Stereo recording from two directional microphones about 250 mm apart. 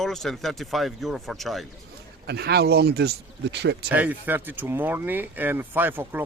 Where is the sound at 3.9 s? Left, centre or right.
Centre.